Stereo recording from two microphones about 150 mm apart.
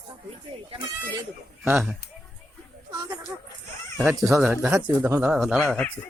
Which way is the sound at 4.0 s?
20° right (ahead or behind).